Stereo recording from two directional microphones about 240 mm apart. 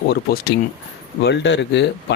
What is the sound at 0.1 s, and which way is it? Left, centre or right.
Speech, left.